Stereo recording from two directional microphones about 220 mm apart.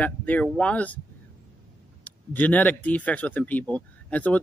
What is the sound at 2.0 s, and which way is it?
Speech, 5° left (ahead or behind).